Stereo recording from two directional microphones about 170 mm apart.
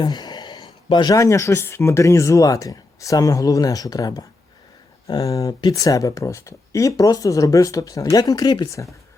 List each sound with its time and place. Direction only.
0.0 s speech: 25° left (ahead or behind)